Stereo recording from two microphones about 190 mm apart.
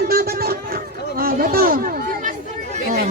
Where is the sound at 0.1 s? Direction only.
50° right (ahead or behind).